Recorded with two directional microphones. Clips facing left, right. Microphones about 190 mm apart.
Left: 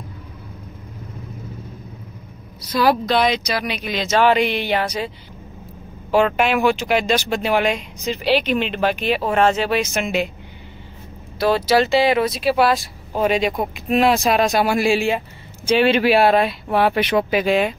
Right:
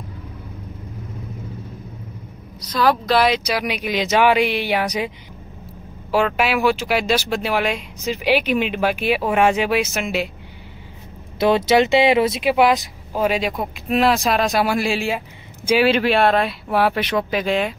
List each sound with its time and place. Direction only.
2.6 s speech: 5° left (ahead or behind)
3.1 s speech: 5° right (ahead or behind)
6.1 s speech: 5° right (ahead or behind)
11.3 s speech: 20° right (ahead or behind)
13.1 s speech: 5° right (ahead or behind)